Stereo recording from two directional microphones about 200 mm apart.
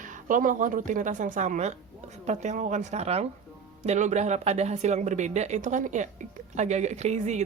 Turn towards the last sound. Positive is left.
turn(degrees=-35)  # may be behind; listen again after turning